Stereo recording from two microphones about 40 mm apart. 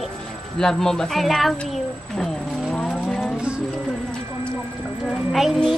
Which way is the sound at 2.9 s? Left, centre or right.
Centre.